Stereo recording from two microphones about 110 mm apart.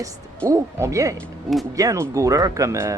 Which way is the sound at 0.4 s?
25° right (ahead or behind).